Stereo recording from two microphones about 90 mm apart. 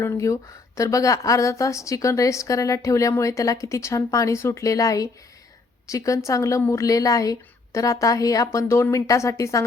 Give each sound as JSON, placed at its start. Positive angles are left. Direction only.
{"t": 0.0, "sound": "a woman's voice", "side_deg": 35}